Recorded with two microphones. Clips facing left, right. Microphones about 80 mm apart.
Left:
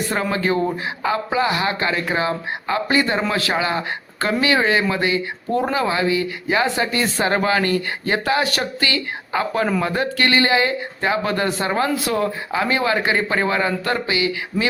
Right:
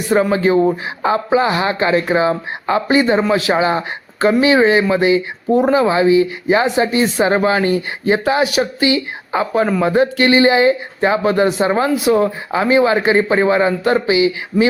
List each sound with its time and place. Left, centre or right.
0.1 s speech: right
14.5 s speech: centre